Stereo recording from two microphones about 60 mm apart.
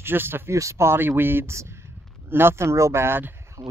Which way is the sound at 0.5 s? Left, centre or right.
Right.